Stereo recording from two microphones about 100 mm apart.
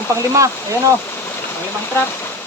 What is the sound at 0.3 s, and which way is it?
Speech, 30° right (ahead or behind).